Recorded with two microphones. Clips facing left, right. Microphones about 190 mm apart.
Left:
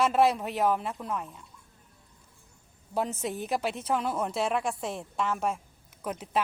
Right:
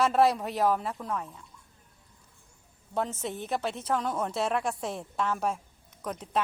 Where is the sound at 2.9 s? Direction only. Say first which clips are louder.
Left 1 dB; 10° left (ahead or behind).